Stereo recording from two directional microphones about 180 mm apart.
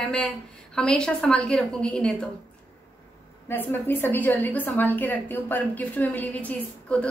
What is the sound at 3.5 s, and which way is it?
A woman's voice, 10° left (ahead or behind).